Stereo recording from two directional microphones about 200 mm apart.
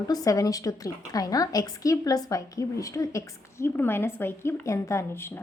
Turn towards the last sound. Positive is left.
turn(degrees=15)  # may be behind; listen again after turning